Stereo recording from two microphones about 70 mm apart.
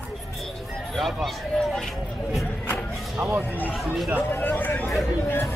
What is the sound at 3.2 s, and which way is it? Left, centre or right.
Speech, centre.